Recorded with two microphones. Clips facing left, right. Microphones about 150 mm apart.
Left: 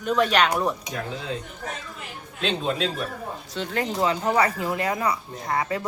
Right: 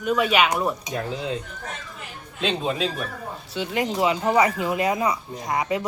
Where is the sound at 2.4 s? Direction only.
10° right (ahead or behind).